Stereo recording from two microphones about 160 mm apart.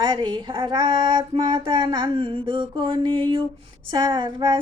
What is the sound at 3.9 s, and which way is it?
Speech, 30° right (ahead or behind).